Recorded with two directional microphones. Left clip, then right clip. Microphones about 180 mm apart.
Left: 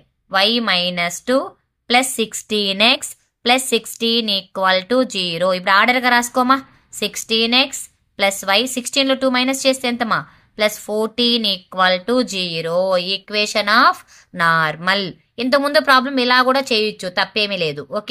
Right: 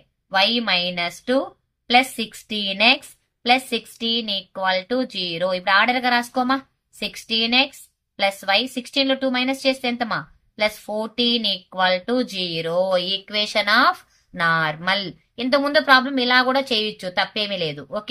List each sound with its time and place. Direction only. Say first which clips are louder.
0.3 s speech: left 3 dB; 30° left (ahead or behind)